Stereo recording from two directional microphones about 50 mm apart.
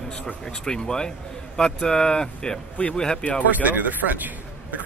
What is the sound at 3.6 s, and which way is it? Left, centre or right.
Speech, right.